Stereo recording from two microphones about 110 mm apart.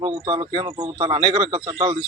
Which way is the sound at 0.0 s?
50° right (ahead or behind).